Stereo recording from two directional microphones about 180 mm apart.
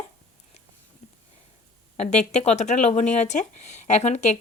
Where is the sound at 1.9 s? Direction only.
40° left (ahead or behind).